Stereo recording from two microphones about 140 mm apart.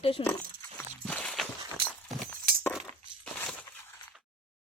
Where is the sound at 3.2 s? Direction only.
5° left (ahead or behind).